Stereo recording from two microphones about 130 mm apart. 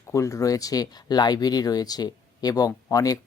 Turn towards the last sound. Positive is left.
turn(degrees=30)  # may be behind; listen again after turning